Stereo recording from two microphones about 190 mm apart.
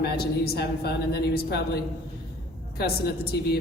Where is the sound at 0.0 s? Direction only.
55° left (ahead or behind).